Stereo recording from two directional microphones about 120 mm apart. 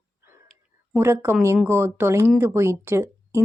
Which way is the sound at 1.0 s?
20° right (ahead or behind).